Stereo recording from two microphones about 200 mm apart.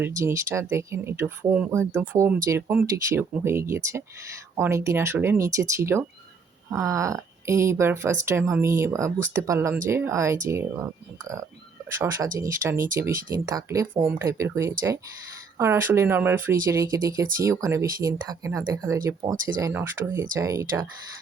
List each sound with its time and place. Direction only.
0.2 s speech: 15° right (ahead or behind)
11.9 s speech: 15° right (ahead or behind)